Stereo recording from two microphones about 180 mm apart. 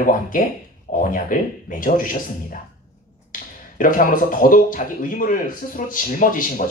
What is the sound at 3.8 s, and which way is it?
Speech, 50° left (ahead or behind).